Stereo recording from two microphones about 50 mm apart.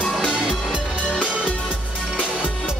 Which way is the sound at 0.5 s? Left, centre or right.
Centre.